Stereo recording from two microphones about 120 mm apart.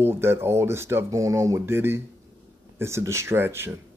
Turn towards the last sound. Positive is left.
turn(degrees=-20)  # may be behind; listen again after turning